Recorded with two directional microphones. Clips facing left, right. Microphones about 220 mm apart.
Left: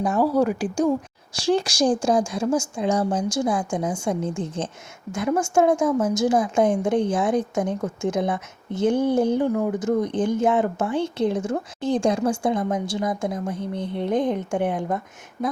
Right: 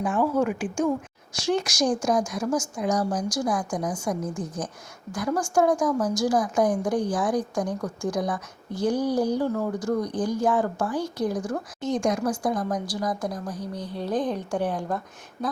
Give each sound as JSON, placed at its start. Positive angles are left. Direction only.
{"t": 0.0, "sound": "a woman's voice", "side_deg": 40}